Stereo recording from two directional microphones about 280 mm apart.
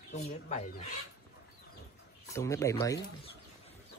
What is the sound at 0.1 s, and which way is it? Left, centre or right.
Speech, left.